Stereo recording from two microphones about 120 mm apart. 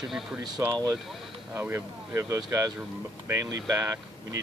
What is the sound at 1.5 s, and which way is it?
Speech, 15° right (ahead or behind).